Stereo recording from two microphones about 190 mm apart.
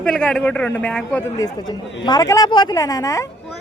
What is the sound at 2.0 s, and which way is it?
Speech, 20° left (ahead or behind).